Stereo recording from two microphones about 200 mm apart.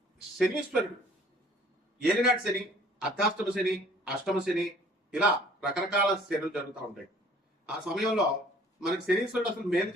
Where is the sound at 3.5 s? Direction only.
Centre (ahead or behind).